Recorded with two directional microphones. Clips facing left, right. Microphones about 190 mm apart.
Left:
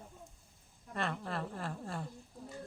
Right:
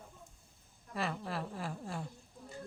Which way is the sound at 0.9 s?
5° right (ahead or behind).